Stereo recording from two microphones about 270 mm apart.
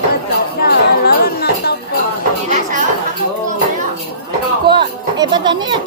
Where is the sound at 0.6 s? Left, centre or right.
Left.